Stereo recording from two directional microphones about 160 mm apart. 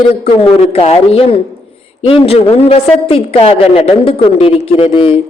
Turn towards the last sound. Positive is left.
turn(degrees=35)  # may be behind; listen again after turning